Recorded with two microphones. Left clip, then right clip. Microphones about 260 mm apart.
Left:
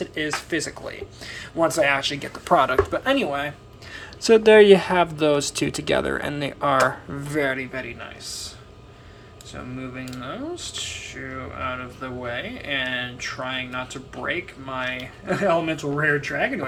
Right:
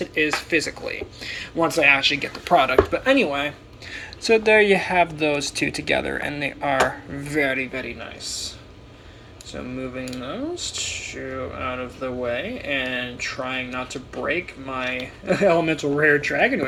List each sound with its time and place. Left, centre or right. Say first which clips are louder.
0.0 s speech: right 5 dB; left
3.9 s speech: left 2 dB; left; by 8.4 s centre
9.6 s speech: right 4 dB; centre